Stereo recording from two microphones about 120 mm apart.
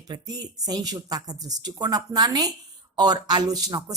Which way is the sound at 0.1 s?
35° right (ahead or behind).